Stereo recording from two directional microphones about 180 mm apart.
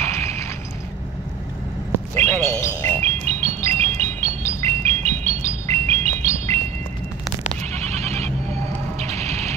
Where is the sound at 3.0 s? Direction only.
35° right (ahead or behind).